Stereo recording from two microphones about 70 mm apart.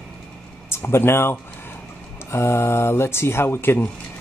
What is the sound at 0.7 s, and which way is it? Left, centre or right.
Speech, left.